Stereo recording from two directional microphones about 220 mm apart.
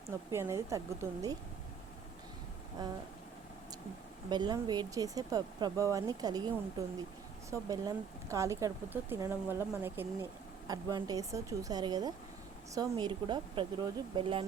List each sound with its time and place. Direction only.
0.3 s speech: 15° right (ahead or behind)
4.3 s speech: 20° right (ahead or behind)